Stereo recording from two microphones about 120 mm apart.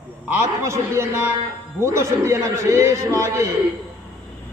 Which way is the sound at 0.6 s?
25° right (ahead or behind).